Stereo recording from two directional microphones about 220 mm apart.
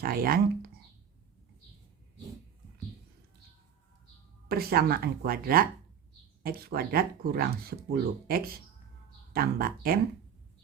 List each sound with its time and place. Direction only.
0.0 s speech: 40° right (ahead or behind)
4.4 s speech: 45° right (ahead or behind)